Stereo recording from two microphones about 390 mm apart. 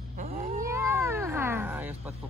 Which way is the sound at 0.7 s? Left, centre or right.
Centre.